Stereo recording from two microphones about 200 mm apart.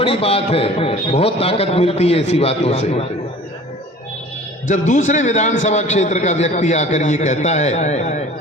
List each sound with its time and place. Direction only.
0.0 s a man's voice: 30° left (ahead or behind)
4.7 s a man's voice: 40° left (ahead or behind)